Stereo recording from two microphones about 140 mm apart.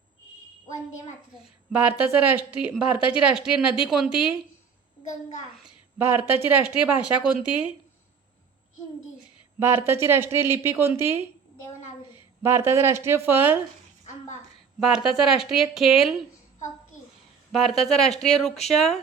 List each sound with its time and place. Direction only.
1.7 s speech: 10° right (ahead or behind)
6.0 s speech: 15° right (ahead or behind)
9.6 s speech: 15° right (ahead or behind)
12.4 s speech: 15° right (ahead or behind)
14.8 s speech: 5° right (ahead or behind)
17.5 s speech: centre (ahead or behind)